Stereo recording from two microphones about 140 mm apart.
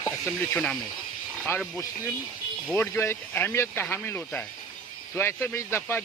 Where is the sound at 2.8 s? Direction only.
15° left (ahead or behind).